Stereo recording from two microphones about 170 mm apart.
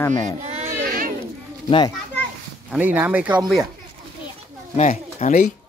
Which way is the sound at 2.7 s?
10° right (ahead or behind).